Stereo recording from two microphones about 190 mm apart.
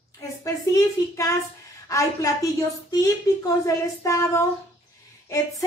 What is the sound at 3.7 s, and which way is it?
Speech, 15° left (ahead or behind).